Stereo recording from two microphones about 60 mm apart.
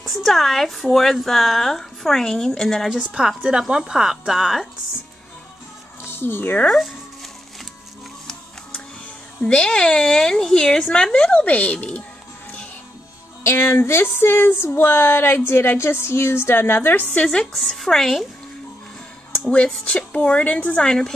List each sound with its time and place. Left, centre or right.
0.0 s a woman's voice: centre
2.9 s a woman's voice: centre
6.0 s speech: left
9.4 s speech: centre
13.4 s a sound: left
17.2 s speech: centre
17.5 s a woman's voice: centre
19.4 s speech: centre